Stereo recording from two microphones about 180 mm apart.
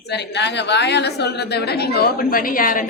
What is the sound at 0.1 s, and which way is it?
A woman's voice, 75° left (ahead or behind).